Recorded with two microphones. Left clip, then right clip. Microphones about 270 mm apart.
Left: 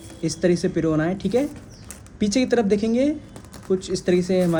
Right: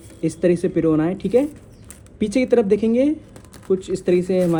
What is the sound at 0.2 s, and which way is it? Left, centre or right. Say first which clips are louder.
A man's voice: right 3 dB; right.